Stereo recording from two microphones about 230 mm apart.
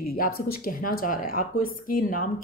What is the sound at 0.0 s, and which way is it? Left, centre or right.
A woman's voice, left.